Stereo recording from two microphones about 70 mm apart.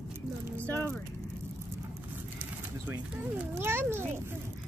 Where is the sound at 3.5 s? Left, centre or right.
Right.